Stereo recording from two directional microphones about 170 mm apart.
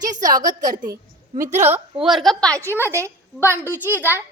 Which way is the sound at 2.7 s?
15° right (ahead or behind).